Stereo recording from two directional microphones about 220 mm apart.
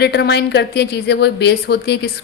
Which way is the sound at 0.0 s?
50° left (ahead or behind).